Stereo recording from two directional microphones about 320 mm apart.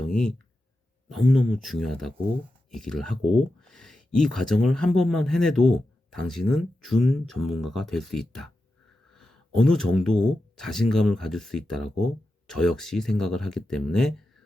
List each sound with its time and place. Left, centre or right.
0.1 s speech: centre